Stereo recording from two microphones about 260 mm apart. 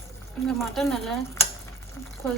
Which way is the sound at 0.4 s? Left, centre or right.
Centre.